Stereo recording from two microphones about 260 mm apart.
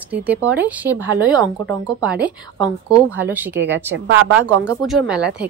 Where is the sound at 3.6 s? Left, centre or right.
Right.